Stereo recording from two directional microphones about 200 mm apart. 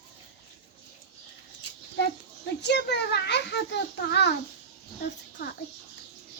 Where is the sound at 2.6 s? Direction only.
55° left (ahead or behind).